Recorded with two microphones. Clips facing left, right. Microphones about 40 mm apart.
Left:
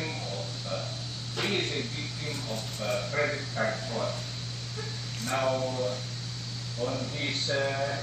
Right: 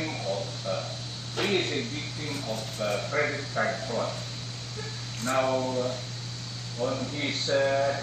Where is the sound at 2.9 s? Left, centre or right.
Centre.